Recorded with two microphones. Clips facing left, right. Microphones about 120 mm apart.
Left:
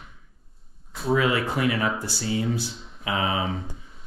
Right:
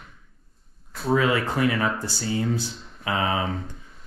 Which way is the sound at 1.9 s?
5° left (ahead or behind).